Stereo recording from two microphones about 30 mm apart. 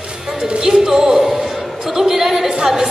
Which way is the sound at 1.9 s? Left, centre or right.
Centre.